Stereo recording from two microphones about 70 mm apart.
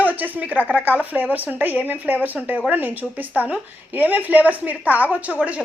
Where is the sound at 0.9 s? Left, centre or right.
Right.